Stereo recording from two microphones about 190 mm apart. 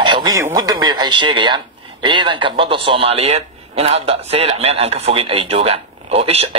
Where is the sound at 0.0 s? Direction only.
25° right (ahead or behind).